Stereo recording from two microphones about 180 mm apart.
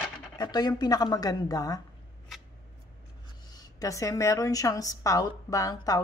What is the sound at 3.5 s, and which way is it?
A woman's voice, 20° left (ahead or behind).